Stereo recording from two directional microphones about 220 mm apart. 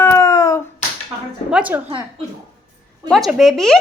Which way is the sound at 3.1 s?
Centre (ahead or behind).